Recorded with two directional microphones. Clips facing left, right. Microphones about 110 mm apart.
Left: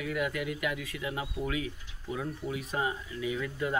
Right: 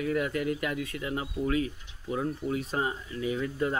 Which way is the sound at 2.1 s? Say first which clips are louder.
Right 5 dB; 30° right (ahead or behind).